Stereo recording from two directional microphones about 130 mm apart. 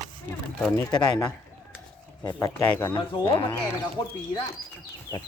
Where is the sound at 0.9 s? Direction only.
35° left (ahead or behind).